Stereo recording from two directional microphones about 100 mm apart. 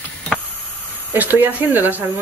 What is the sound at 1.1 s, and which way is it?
Speech, 20° right (ahead or behind).